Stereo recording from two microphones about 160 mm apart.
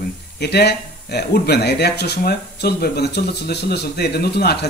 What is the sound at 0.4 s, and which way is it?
Speech, 90° left.